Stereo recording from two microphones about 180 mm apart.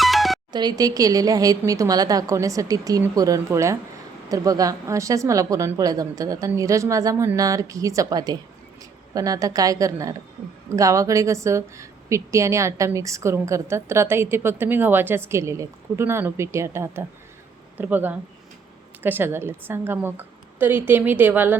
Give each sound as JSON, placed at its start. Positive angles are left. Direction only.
{"t": 0.0, "sound": "music", "side_deg": 0}
{"t": 0.5, "sound": "a woman's voice", "side_deg": -25}